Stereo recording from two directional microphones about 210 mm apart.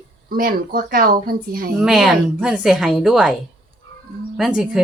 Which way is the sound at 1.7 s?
Centre (ahead or behind).